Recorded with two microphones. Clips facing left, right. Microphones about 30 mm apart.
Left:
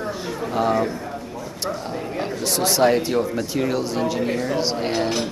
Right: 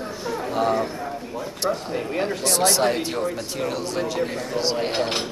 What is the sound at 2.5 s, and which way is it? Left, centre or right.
Speech, centre.